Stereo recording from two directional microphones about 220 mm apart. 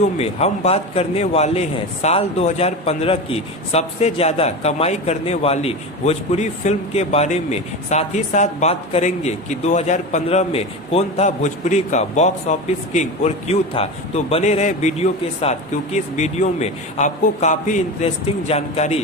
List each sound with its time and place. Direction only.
0.2 s a man's voice: 30° left (ahead or behind)